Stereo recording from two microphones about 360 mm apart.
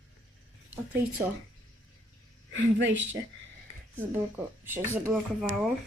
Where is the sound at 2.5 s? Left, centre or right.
Right.